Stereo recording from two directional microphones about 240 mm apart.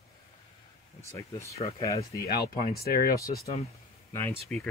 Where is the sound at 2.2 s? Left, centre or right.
Left.